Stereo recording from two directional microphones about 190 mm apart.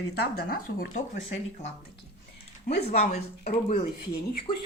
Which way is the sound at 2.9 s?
35° left (ahead or behind).